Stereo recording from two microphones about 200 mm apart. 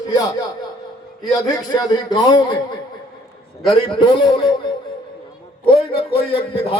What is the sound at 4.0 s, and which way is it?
Speech, 20° left (ahead or behind).